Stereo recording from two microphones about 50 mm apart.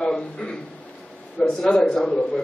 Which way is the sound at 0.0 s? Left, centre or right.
Centre.